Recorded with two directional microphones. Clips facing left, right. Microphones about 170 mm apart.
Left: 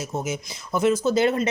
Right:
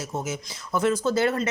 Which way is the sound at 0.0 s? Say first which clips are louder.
Left 2 dB; 15° left (ahead or behind).